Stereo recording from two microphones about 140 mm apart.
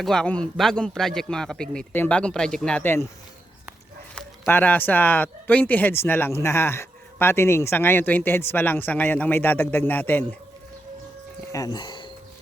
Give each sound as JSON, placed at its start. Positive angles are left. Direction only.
{"t": 0.0, "sound": "a man's voice", "side_deg": 5}
{"t": 4.1, "sound": "speech", "side_deg": 15}
{"t": 11.5, "sound": "speech", "side_deg": 30}